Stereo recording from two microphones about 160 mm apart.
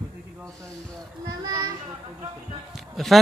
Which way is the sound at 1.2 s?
25° right (ahead or behind).